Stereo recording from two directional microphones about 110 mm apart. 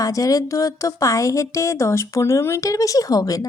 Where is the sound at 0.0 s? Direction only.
30° left (ahead or behind).